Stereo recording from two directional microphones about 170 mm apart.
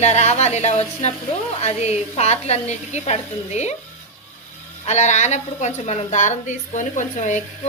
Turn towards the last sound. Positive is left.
turn(degrees=45)  # may be behind; listen again after turning